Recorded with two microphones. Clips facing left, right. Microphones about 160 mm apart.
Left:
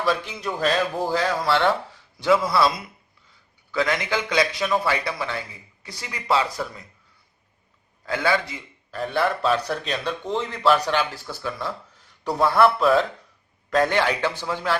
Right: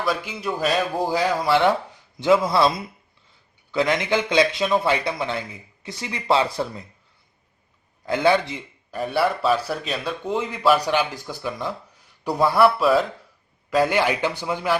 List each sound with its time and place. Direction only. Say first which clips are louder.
0.0 s a man's voice: left 1 dB; 5° right (ahead or behind); by 2.6 s 20° right (ahead or behind)
3.7 s a man's voice: right 3 dB; 20° right (ahead or behind)
8.0 s speech: right 4 dB; 20° right (ahead or behind)